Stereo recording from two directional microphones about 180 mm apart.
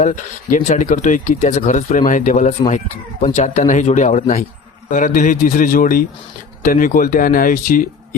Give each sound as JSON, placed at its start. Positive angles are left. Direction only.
{"t": 0.0, "sound": "speech", "side_deg": 40}